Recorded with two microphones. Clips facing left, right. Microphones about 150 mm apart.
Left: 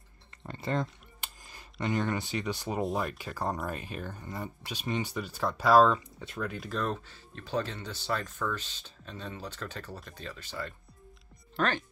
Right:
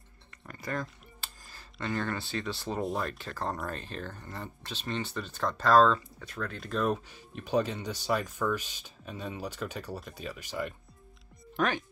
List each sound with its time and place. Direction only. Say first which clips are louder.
0.5 s a sound: left 4 dB; 25° left (ahead or behind)
2.8 s speech: left 1 dB; centre (ahead or behind); by 6.5 s 15° left (ahead or behind)
6.5 s speech: right 5 dB; centre (ahead or behind)
6.9 s speech: right 4 dB; 15° right (ahead or behind)